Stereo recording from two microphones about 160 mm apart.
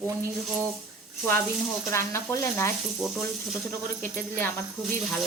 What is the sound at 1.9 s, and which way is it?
Speech, 20° left (ahead or behind).